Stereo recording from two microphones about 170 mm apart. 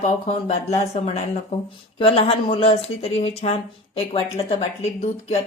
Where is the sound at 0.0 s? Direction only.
40° left (ahead or behind).